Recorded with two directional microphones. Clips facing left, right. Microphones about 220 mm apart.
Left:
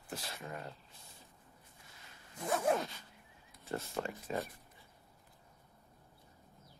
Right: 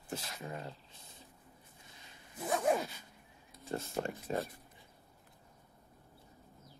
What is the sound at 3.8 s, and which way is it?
Speech, 40° right (ahead or behind).